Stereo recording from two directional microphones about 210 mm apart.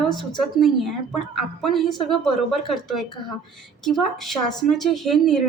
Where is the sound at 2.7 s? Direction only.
Centre (ahead or behind).